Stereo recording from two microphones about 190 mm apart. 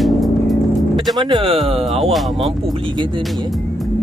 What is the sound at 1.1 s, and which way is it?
Music, 25° right (ahead or behind).